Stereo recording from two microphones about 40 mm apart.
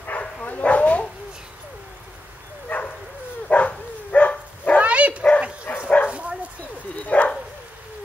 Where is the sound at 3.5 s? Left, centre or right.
Left.